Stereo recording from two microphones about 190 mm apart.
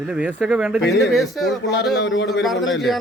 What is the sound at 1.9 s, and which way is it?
Speech, 70° left (ahead or behind).